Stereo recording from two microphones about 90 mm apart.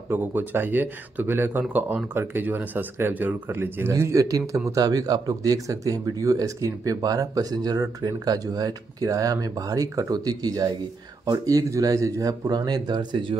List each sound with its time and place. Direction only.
0.1 s speech: 25° right (ahead or behind)
3.9 s speech: 35° right (ahead or behind); by 13.4 s 65° right (ahead or behind)